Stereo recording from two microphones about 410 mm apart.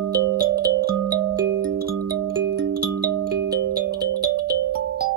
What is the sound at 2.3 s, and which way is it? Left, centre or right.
Music, right.